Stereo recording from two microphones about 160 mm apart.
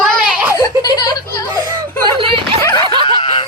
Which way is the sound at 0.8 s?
25° left (ahead or behind).